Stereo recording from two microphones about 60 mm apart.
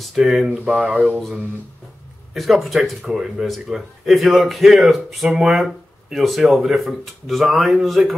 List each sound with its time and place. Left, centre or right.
0.0 s speech: centre
0.8 s speech: right
2.3 s speech: centre